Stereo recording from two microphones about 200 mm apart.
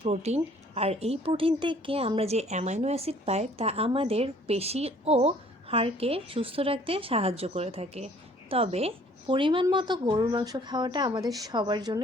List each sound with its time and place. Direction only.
0.0 s a woman's voice: 30° right (ahead or behind)